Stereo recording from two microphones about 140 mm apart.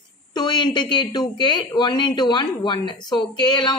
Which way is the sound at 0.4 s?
30° left (ahead or behind).